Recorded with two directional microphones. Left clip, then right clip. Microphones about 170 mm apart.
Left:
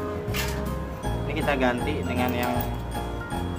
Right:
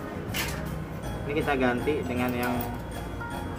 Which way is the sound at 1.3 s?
15° left (ahead or behind).